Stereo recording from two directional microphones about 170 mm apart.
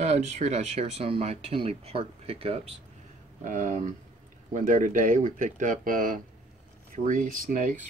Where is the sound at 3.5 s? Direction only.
50° right (ahead or behind).